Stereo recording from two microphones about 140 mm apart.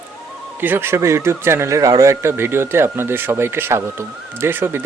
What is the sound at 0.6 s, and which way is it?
Speech, 15° right (ahead or behind).